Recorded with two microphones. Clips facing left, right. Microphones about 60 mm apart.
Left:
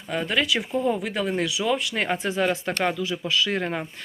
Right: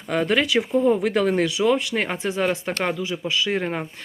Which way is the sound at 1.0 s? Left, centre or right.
Right.